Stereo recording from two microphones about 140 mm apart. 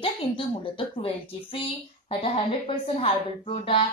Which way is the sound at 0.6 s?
40° left (ahead or behind).